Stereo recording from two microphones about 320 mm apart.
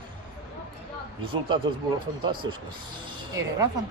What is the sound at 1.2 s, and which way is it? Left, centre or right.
Speech, centre.